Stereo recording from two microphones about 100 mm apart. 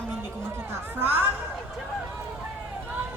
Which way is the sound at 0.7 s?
25° right (ahead or behind).